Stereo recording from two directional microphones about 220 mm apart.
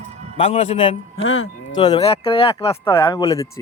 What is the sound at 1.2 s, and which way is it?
Speech, 65° left (ahead or behind).